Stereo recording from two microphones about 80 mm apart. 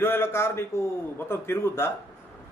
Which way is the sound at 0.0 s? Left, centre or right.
Left.